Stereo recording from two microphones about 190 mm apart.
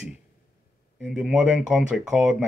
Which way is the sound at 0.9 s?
5° right (ahead or behind).